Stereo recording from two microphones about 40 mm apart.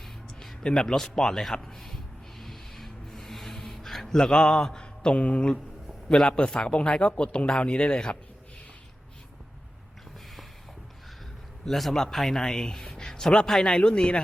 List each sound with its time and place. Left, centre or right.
0.6 s speech: centre
2.4 s a sound: centre
4.0 s speech: centre
11.7 s a man's voice: centre
12.4 s speech: centre